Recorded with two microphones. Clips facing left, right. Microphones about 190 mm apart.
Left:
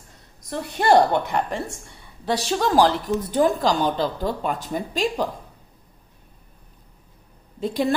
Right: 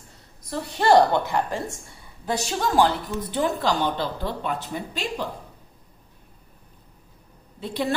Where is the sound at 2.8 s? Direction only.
45° left (ahead or behind).